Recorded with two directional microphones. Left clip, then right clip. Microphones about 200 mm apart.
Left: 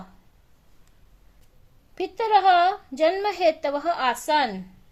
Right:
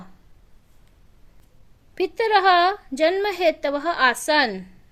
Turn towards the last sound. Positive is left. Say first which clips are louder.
# right 2 dB
turn(degrees=-45)  # may be behind; listen again after turning